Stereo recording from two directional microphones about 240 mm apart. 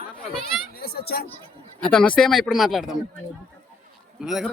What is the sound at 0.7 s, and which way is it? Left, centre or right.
Speech, left.